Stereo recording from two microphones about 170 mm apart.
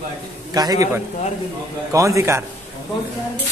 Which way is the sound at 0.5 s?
20° right (ahead or behind).